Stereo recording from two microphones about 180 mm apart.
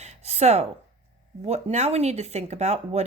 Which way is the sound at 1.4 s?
35° right (ahead or behind).